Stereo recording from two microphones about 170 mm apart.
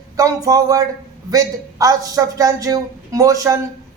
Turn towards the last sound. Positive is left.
turn(degrees=-20)  # may be behind; listen again after turning